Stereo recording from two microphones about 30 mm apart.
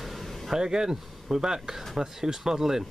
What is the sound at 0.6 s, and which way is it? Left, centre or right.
Speech, right.